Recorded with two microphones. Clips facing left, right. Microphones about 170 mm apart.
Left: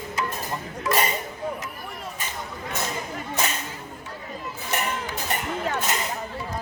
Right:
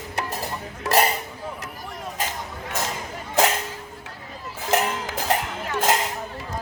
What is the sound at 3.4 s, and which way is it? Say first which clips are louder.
Music: right 9 dB; 90° right.